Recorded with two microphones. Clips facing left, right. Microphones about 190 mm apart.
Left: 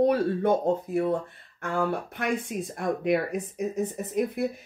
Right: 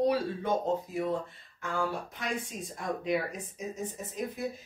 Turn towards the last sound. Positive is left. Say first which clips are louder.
# left 9 dB
turn(degrees=65)  # may be behind; listen again after turning